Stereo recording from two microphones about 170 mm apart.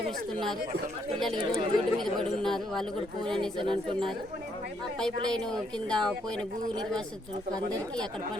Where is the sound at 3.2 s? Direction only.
30° right (ahead or behind).